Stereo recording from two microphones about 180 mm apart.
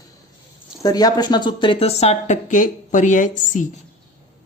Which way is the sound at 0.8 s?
20° left (ahead or behind).